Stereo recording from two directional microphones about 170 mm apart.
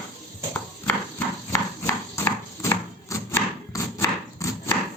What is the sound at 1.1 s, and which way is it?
Horse, 15° left (ahead or behind).